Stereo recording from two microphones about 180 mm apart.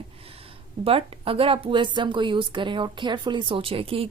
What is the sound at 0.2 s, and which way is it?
Speech, 30° right (ahead or behind).